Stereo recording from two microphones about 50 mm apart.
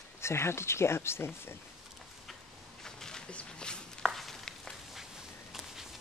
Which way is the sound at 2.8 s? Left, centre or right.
Centre.